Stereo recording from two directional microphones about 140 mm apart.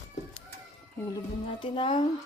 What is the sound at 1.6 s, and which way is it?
Speech, 35° left (ahead or behind).